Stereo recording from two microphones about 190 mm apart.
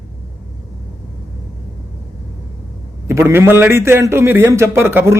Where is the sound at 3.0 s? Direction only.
10° right (ahead or behind).